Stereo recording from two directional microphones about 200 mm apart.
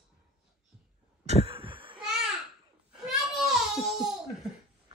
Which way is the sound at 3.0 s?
Centre (ahead or behind).